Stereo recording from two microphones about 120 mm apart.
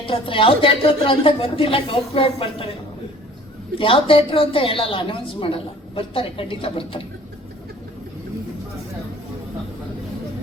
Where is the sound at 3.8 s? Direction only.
45° left (ahead or behind).